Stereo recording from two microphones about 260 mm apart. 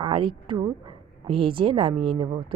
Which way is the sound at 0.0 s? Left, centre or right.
Centre.